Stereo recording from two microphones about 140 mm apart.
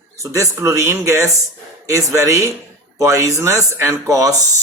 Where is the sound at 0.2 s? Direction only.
20° right (ahead or behind).